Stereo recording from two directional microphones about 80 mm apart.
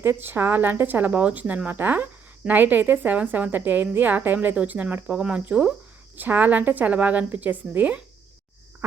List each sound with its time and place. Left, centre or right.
0.0 s a woman's voice: right